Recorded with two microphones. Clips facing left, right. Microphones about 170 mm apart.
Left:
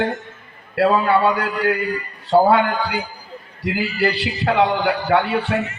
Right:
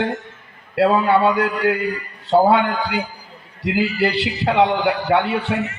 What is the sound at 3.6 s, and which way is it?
A man's voice, 25° right (ahead or behind).